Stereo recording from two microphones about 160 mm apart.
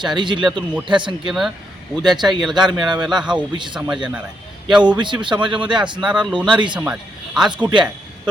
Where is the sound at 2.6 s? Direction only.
Centre (ahead or behind).